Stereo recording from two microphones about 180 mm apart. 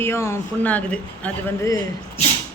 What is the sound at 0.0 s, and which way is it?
Speech, 15° left (ahead or behind).